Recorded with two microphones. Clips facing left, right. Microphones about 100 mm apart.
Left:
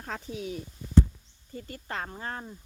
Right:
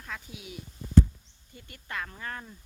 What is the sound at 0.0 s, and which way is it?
Speech, 40° left (ahead or behind).